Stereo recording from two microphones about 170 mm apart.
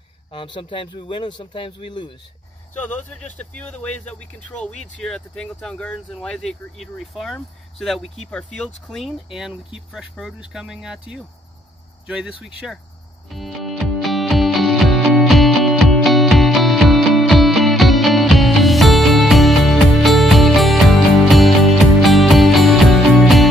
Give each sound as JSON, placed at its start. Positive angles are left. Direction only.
{"t": 0.3, "sound": "a man's voice", "side_deg": 30}
{"t": 2.8, "sound": "a man's voice", "side_deg": 10}
{"t": 13.3, "sound": "music", "side_deg": 0}